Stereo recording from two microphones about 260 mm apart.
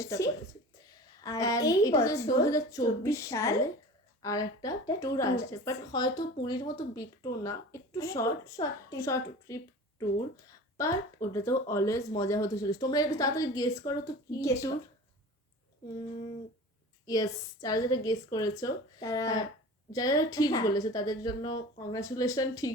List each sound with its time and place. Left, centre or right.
0.0 s a woman's voice: centre
10.8 s a woman's voice: centre
17.1 s a woman's voice: centre